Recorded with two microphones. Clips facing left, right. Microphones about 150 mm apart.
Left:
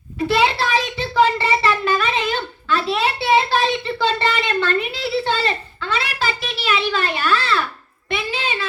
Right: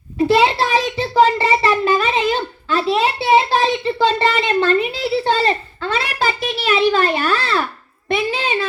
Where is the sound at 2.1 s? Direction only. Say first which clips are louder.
Right 4 dB; 40° right (ahead or behind).